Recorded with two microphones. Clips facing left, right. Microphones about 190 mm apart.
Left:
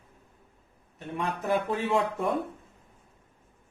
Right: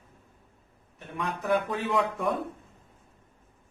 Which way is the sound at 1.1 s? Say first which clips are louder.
Right 1 dB; 25° left (ahead or behind).